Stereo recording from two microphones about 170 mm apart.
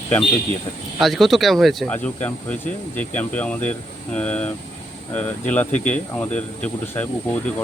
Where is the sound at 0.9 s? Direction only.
Centre (ahead or behind).